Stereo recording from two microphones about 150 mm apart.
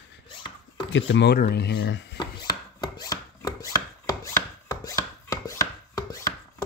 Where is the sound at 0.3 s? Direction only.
35° left (ahead or behind).